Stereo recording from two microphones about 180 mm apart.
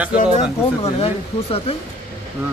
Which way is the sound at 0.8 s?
35° left (ahead or behind).